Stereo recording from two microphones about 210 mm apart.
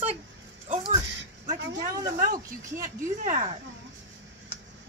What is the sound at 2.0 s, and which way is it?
Speech, 45° right (ahead or behind).